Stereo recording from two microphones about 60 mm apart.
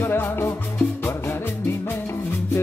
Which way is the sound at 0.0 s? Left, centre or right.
Left.